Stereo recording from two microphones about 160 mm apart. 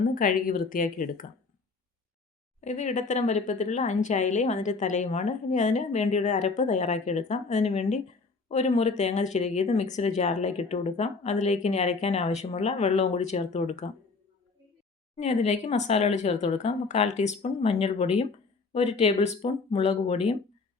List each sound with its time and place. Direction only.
0.0 s a woman's voice: 60° left (ahead or behind)
2.6 s speech: 50° left (ahead or behind)
15.1 s speech: 45° left (ahead or behind)